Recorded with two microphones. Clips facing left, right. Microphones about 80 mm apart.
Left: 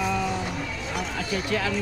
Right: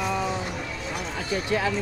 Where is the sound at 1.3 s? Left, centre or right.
Right.